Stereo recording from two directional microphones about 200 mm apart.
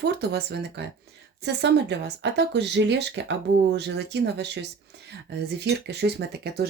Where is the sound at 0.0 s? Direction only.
55° right (ahead or behind).